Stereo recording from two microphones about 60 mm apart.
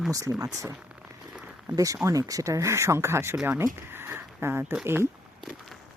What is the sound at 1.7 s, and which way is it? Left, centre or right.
Speech, right.